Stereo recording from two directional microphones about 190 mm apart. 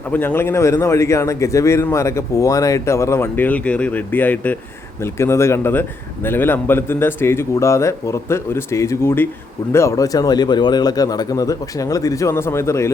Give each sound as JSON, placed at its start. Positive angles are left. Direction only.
{"t": 0.1, "sound": "a man's voice", "side_deg": 10}